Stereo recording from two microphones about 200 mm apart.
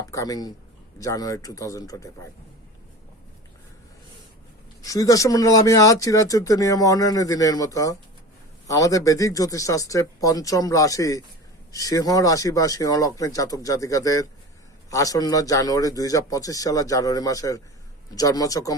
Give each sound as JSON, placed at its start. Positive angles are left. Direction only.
{"t": 0.1, "sound": "speech", "side_deg": 15}
{"t": 4.8, "sound": "speech", "side_deg": 15}